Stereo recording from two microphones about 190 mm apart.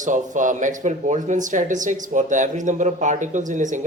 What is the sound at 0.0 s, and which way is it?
Speech, 40° right (ahead or behind).